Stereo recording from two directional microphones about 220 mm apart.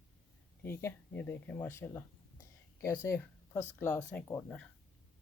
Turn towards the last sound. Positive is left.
turn(degrees=10)  # may be behind; listen again after turning